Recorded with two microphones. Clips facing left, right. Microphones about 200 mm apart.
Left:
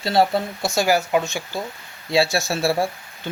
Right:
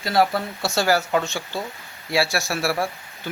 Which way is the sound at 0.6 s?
15° left (ahead or behind).